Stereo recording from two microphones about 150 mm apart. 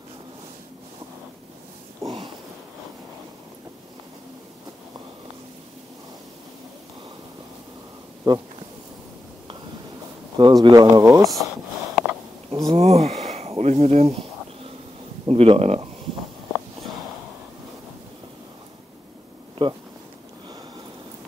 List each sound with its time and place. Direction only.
8.3 s speech: 30° right (ahead or behind)
10.3 s speech: 30° right (ahead or behind)
11.2 s a sound: centre (ahead or behind)
12.7 s a sound: 45° right (ahead or behind)
15.2 s speech: 40° right (ahead or behind)
19.6 s speech: 30° right (ahead or behind)